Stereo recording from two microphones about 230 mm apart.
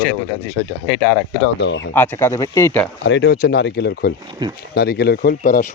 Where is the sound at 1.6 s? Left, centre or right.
Left.